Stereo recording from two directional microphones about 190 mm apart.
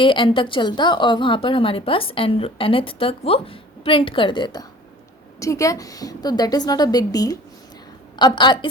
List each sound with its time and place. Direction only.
0.0 s a woman's voice: 25° left (ahead or behind)